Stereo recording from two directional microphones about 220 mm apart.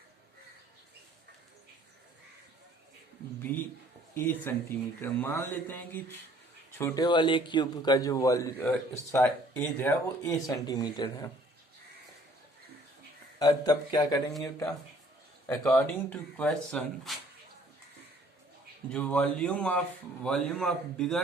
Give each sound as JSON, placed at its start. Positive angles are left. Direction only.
{"t": 4.1, "sound": "a man's voice", "side_deg": 10}
{"t": 13.4, "sound": "a man's voice", "side_deg": 15}
{"t": 15.4, "sound": "speech", "side_deg": 15}
{"t": 18.9, "sound": "speech", "side_deg": 5}